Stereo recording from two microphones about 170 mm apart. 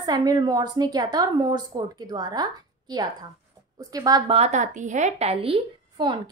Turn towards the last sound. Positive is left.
turn(degrees=-30)  # may be behind; listen again after turning